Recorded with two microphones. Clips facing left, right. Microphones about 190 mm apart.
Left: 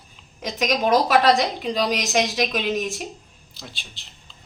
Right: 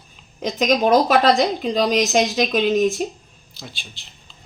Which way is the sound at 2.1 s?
30° right (ahead or behind).